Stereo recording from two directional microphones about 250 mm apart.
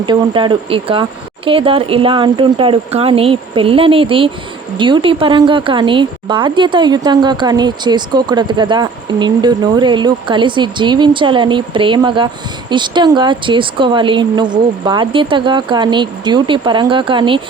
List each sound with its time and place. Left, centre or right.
0.0 s speech: centre